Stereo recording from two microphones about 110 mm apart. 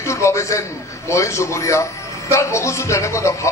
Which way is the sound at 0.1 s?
25° left (ahead or behind).